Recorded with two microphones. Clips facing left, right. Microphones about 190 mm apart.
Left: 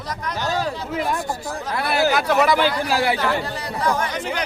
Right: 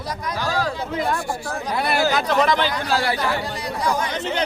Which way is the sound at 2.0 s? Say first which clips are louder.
Left 3 dB; 10° left (ahead or behind).